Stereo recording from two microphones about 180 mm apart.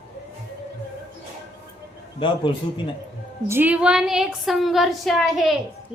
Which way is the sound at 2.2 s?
25° left (ahead or behind).